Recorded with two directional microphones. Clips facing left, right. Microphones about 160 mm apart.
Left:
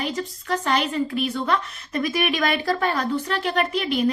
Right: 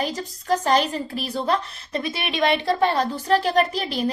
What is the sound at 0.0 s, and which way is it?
A woman's voice, 40° right (ahead or behind).